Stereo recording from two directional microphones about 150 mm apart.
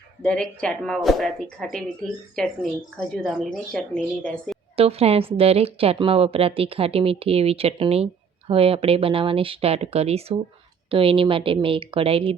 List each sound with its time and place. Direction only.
0.2 s speech: 5° left (ahead or behind)
4.8 s a woman's voice: 40° right (ahead or behind)